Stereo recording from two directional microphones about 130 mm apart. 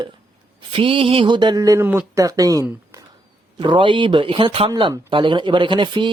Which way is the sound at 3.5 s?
40° right (ahead or behind).